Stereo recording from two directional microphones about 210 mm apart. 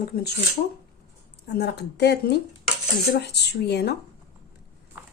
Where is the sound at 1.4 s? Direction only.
50° left (ahead or behind).